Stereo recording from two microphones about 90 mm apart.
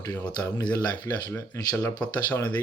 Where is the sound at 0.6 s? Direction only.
50° left (ahead or behind).